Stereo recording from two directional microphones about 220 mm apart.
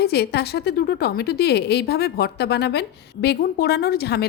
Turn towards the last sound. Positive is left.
turn(degrees=45)  # may be behind; listen again after turning